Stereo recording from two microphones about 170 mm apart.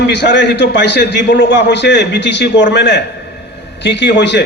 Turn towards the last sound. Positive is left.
turn(degrees=90)